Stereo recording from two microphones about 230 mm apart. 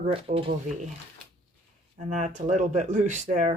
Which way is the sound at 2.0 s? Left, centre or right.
Right.